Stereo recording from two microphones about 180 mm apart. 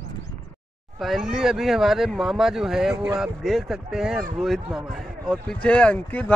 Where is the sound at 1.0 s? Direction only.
Centre (ahead or behind).